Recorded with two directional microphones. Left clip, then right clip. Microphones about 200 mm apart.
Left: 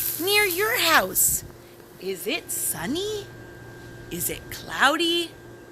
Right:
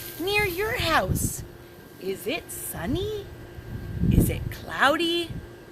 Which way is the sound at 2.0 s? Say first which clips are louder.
Left 1 dB; 30° right (ahead or behind).